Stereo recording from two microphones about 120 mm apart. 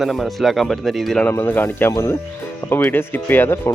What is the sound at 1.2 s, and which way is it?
Speech, 15° left (ahead or behind).